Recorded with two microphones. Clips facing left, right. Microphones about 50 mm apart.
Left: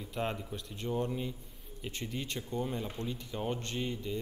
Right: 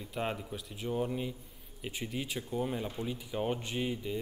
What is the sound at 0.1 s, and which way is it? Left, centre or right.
Speech, centre.